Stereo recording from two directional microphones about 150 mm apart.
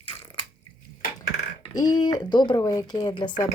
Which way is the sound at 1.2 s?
25° left (ahead or behind).